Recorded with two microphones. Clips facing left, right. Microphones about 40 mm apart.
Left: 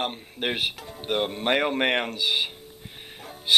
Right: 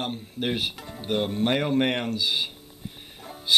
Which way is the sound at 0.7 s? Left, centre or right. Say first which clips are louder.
Right 1 dB; centre.